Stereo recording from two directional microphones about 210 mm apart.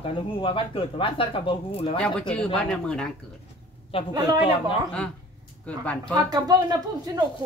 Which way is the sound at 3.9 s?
25° left (ahead or behind).